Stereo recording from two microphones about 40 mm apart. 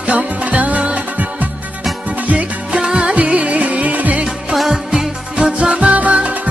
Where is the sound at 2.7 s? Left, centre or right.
Right.